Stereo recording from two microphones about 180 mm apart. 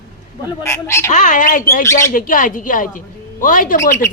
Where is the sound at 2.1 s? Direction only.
50° left (ahead or behind).